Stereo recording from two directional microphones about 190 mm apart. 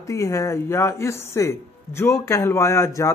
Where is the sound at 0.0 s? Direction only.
15° left (ahead or behind).